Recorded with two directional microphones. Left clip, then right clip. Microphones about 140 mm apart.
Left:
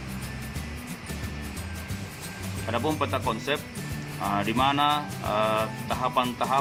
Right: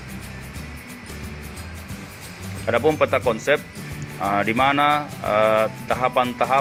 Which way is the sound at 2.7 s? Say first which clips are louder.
Right 9 dB; 35° right (ahead or behind).